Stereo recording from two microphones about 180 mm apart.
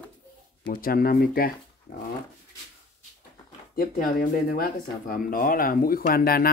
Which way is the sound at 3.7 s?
55° left (ahead or behind).